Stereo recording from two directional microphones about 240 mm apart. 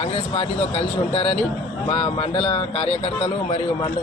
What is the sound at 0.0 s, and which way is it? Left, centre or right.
Speech, left.